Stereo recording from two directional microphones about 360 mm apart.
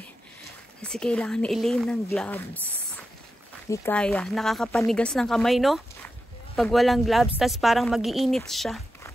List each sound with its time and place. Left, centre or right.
0.8 s speech: centre
3.7 s speech: centre